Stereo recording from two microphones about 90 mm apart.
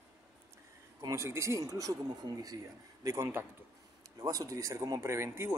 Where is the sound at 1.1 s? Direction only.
30° right (ahead or behind).